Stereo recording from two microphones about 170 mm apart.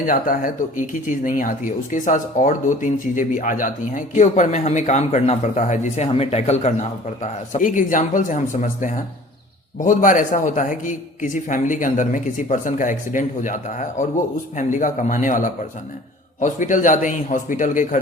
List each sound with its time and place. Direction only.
0.1 s speech: 50° left (ahead or behind)